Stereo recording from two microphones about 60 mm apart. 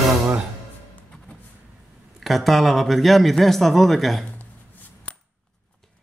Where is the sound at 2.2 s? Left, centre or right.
Centre.